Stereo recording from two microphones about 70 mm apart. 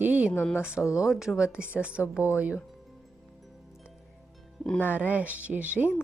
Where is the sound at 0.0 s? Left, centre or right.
Right.